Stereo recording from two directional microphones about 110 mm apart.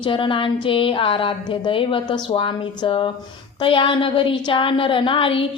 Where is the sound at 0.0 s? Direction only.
50° left (ahead or behind).